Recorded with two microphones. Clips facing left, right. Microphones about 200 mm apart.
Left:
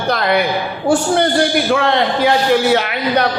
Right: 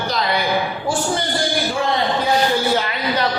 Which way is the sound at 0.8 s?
70° left (ahead or behind).